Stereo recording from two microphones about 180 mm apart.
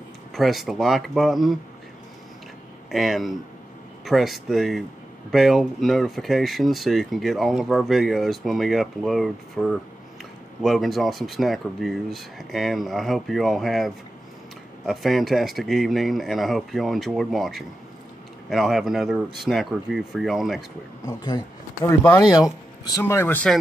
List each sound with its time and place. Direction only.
0.3 s speech: centre (ahead or behind)
2.9 s speech: centre (ahead or behind)
21.0 s speech: 20° left (ahead or behind)